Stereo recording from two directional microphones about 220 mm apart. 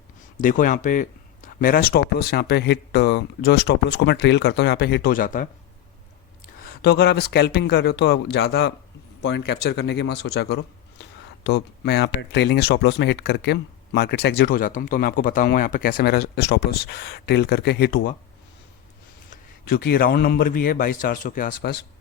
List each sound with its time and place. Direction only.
0.3 s speech: 35° left (ahead or behind)
19.3 s a man's voice: 45° left (ahead or behind)